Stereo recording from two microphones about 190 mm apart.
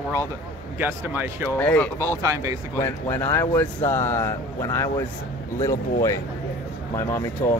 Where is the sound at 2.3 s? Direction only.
20° right (ahead or behind).